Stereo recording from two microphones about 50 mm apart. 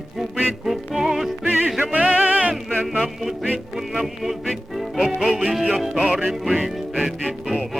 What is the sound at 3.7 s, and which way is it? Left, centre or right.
Music, centre.